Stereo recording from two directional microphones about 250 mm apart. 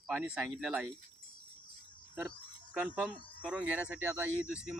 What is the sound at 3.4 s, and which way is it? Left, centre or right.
Speech, centre.